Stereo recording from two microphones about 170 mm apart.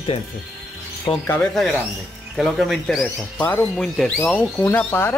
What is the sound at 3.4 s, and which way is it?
Speech, 10° left (ahead or behind).